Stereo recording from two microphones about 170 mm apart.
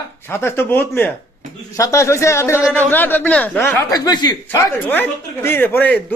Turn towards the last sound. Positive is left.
turn(degrees=10)  # may be behind; listen again after turning